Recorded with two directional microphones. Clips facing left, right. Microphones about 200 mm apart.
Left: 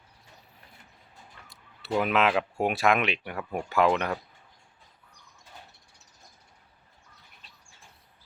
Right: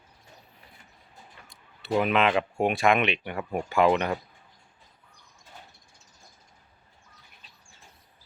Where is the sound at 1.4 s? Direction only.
Centre (ahead or behind).